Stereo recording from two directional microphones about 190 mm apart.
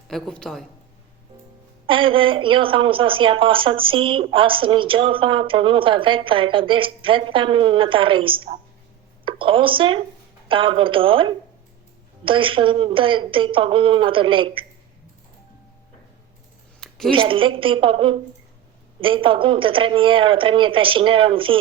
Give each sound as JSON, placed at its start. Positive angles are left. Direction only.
{"t": 0.1, "sound": "a woman's voice", "side_deg": 5}
{"t": 1.9, "sound": "a woman's voice", "side_deg": -25}
{"t": 17.1, "sound": "a woman's voice", "side_deg": -25}